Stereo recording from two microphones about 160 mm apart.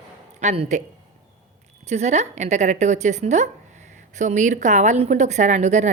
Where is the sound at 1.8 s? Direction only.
45° right (ahead or behind).